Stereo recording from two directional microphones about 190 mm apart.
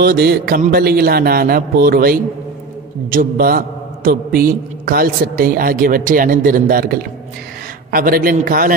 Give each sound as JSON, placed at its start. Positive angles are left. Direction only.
{"t": 0.0, "sound": "a man's voice", "side_deg": -55}